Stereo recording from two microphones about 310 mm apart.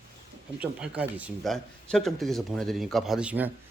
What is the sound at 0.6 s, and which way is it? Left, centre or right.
Speech, centre.